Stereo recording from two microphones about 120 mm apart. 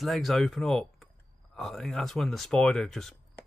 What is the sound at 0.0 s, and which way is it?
Speech, centre (ahead or behind).